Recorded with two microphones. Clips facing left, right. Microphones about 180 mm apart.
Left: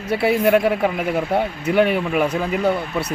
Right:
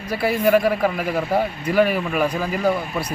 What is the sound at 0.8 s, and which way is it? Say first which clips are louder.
Speech: left 1 dB; 20° left (ahead or behind).